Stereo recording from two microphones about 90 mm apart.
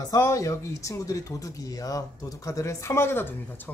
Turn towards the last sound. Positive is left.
turn(degrees=25)  # may be behind; listen again after turning